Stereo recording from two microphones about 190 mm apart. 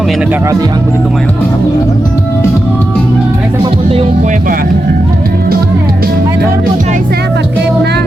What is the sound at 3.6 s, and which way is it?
Music, 30° right (ahead or behind).